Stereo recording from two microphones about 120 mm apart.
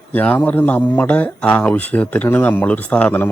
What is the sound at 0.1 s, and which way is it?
A man's voice, 15° left (ahead or behind).